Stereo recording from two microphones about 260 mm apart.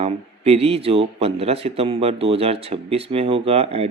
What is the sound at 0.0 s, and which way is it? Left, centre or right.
Speech, right.